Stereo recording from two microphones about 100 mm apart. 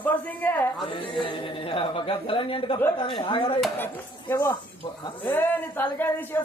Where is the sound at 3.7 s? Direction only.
20° left (ahead or behind).